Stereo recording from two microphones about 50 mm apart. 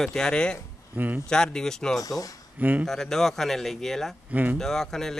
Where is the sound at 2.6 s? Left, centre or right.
Right.